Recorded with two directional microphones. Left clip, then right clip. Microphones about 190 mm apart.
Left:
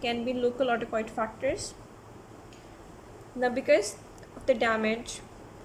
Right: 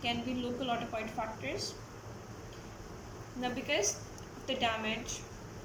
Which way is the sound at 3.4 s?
55° left (ahead or behind).